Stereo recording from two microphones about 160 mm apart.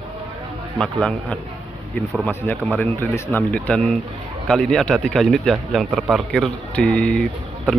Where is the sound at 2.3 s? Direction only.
15° left (ahead or behind).